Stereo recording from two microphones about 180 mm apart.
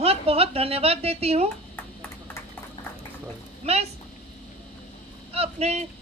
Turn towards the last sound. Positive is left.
turn(degrees=-35)  # may be behind; listen again after turning